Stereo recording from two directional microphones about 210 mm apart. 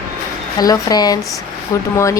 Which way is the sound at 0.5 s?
15° left (ahead or behind).